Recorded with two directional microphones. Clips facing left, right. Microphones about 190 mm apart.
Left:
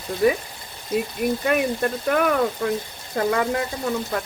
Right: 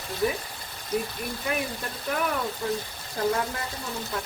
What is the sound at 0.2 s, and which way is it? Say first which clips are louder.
Speech: left 8 dB; 65° left (ahead or behind).